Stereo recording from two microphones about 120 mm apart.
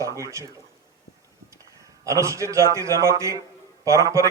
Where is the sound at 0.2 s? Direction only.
25° right (ahead or behind).